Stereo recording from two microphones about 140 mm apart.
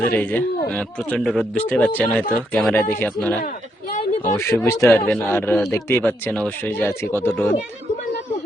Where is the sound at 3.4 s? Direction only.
90° left.